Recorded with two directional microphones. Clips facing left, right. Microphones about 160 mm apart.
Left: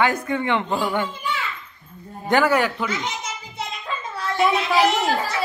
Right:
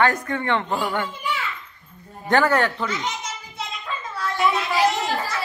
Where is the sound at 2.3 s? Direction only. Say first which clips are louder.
Even; 10° left (ahead or behind).